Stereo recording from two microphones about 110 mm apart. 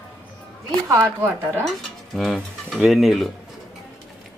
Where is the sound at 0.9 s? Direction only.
25° right (ahead or behind).